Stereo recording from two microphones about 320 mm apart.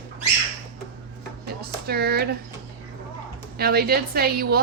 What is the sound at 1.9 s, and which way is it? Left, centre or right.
Speech, right.